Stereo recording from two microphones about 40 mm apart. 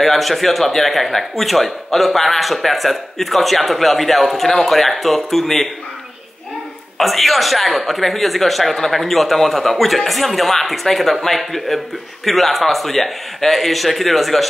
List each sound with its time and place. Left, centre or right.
0.0 s speech: centre
7.0 s speech: centre